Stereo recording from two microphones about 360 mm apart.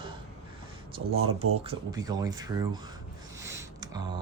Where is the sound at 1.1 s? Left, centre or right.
Right.